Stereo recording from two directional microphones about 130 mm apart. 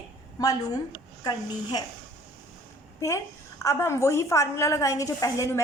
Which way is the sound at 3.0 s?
25° left (ahead or behind).